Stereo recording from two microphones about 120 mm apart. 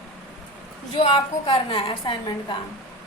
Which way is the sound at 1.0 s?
45° left (ahead or behind).